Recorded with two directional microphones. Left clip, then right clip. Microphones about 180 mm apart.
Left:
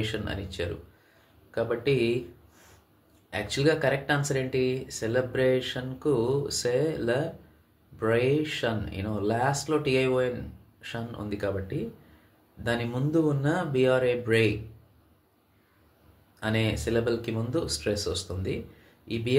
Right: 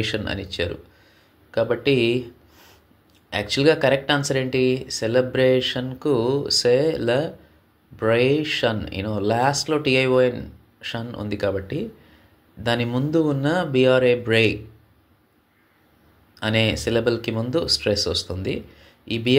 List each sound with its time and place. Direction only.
0.0 s speech: 35° right (ahead or behind)
16.3 s speech: 35° right (ahead or behind)